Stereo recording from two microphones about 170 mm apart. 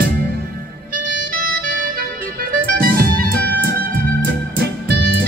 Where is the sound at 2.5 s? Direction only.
60° right (ahead or behind).